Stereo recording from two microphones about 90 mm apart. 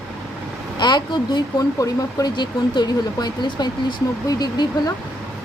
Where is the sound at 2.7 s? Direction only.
55° left (ahead or behind).